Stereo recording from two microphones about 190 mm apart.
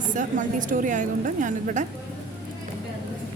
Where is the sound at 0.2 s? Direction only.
45° right (ahead or behind).